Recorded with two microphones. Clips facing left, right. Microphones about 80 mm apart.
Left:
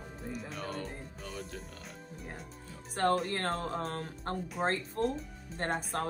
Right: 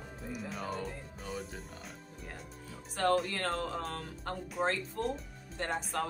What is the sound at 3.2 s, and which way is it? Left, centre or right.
Speech, left.